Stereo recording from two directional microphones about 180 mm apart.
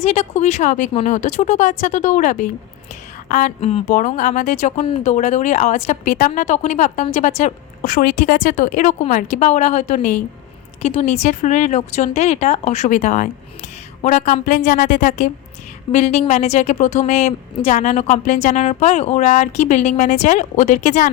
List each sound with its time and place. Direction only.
0.0 s speech: 35° left (ahead or behind)